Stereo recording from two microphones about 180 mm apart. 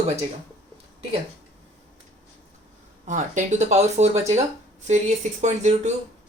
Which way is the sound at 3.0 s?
45° right (ahead or behind).